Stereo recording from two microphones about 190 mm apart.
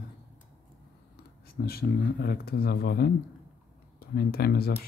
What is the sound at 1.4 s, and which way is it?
Speech, 55° left (ahead or behind).